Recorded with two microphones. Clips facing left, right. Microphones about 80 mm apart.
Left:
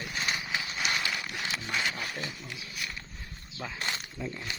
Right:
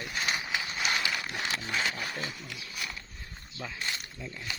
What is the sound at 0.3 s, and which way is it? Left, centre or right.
Horse, right.